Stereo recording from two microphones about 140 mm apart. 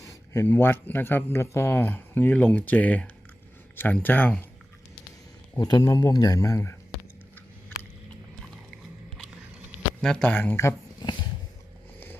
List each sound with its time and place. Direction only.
0.0 s speech: 20° left (ahead or behind)
5.5 s speech: 30° left (ahead or behind)
10.0 s speech: 5° left (ahead or behind)